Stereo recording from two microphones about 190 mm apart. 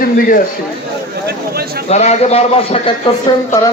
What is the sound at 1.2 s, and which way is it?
Speech, 55° right (ahead or behind).